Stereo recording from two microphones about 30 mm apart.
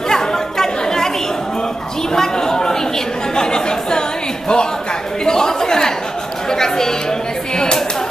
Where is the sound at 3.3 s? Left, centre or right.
Left.